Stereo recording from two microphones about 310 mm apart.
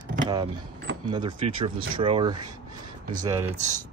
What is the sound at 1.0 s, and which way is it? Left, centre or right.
Speech, centre.